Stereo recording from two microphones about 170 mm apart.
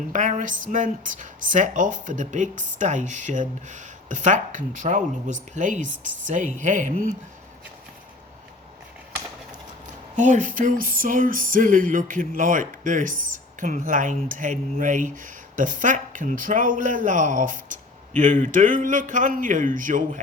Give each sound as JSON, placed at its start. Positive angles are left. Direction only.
{"t": 0.1, "sound": "speech", "side_deg": -50}
{"t": 10.2, "sound": "speech", "side_deg": -45}